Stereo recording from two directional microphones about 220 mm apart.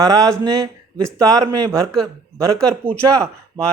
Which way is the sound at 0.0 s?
15° right (ahead or behind).